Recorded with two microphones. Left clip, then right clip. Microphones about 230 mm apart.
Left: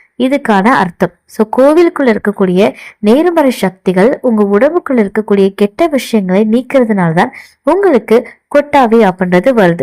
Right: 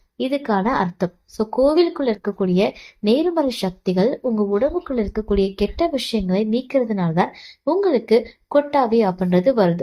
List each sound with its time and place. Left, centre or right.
0.2 s a woman's voice: left